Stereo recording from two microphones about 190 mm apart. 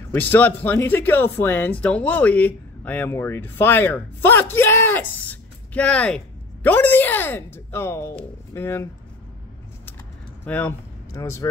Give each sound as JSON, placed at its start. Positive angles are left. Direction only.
{"t": 0.1, "sound": "speech", "side_deg": 10}
{"t": 10.4, "sound": "speech", "side_deg": 10}